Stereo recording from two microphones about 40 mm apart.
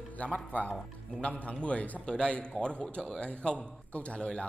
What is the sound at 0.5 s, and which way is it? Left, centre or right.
A man's voice, left.